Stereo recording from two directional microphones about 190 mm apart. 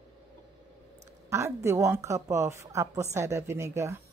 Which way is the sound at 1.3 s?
15° right (ahead or behind).